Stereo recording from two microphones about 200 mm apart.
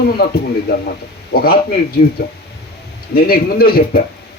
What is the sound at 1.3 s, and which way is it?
Speech, 50° left (ahead or behind).